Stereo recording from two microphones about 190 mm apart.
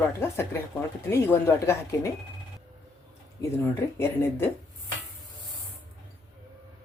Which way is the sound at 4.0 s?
10° left (ahead or behind).